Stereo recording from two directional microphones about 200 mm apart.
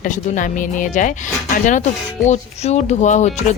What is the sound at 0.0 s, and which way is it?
Speech, 40° left (ahead or behind).